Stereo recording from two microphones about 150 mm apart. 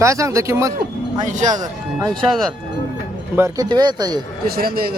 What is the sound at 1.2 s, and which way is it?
Speech, 55° right (ahead or behind).